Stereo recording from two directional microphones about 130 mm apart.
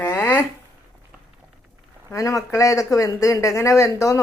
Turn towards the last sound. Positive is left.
turn(degrees=25)  # may be behind; listen again after turning